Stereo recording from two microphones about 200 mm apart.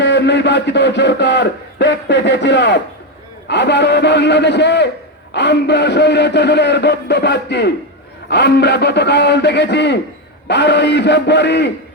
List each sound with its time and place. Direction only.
0.0 s a man's voice: 60° left (ahead or behind)